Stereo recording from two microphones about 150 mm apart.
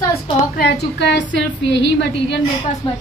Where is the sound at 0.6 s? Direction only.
90° left.